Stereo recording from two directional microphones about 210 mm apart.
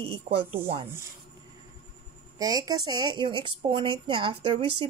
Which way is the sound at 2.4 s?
20° right (ahead or behind).